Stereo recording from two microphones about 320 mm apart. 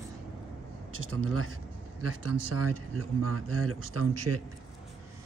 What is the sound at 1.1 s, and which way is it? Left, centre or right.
Speech, right.